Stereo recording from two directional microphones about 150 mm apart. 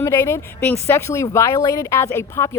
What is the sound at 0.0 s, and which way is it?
A woman's voice, 15° left (ahead or behind).